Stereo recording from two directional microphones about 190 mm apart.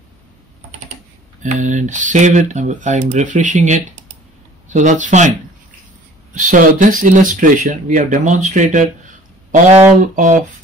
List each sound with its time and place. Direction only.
1.4 s speech: 40° right (ahead or behind)
6.3 s speech: 45° right (ahead or behind)